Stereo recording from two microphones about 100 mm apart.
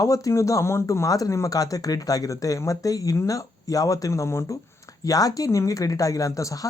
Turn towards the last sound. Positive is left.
turn(degrees=35)  # may be behind; listen again after turning